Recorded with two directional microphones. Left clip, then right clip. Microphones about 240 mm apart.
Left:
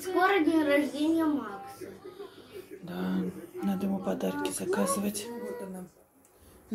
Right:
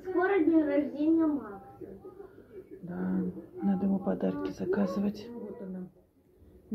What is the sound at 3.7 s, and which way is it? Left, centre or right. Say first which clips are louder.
Speech: right 1 dB; centre.